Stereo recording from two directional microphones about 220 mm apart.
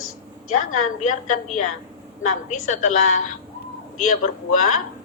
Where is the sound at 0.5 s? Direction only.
35° left (ahead or behind).